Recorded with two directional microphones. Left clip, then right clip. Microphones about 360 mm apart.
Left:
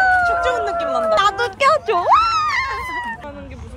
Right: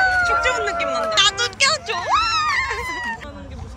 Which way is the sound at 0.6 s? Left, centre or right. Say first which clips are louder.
Left 2 dB; centre.